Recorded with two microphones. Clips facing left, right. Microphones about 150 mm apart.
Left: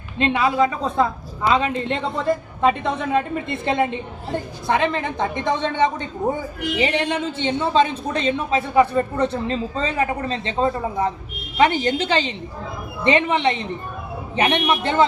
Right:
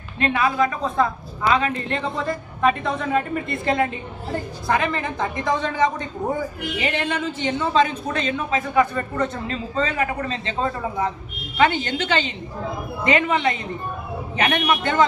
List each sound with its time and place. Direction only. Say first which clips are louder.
0.2 s a woman's voice: left 2 dB; 25° left (ahead or behind)